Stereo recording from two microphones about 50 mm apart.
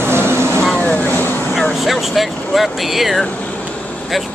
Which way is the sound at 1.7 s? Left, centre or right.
Centre.